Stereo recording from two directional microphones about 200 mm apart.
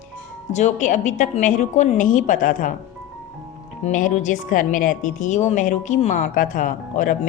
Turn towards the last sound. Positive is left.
turn(degrees=40)  # may be behind; listen again after turning